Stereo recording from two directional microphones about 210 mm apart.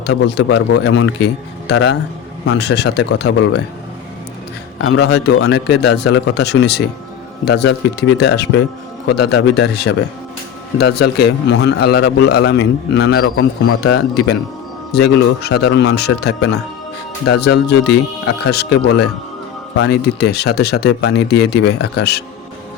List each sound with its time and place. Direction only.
0.0 s a man's voice: 55° left (ahead or behind)
4.9 s a man's voice: 50° left (ahead or behind)